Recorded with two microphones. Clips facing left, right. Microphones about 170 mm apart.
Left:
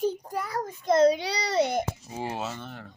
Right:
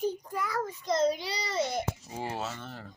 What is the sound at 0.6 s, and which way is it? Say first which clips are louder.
A child's voice: left 8 dB; 55° left (ahead or behind).